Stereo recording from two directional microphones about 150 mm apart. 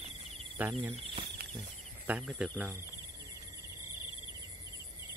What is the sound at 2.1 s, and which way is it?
Speech, 10° right (ahead or behind).